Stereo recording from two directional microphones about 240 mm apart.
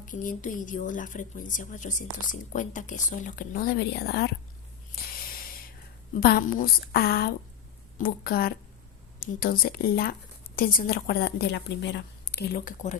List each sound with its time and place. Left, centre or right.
0.0 s speech: left
6.1 s speech: left